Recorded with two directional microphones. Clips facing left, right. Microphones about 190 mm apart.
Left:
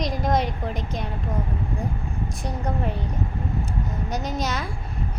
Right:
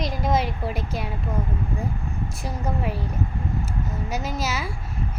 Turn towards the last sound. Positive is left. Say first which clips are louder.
# left 1 dB
turn(degrees=-5)  # may be behind; listen again after turning